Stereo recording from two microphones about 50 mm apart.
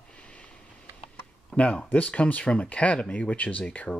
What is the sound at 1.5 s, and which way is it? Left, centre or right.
Speech, left.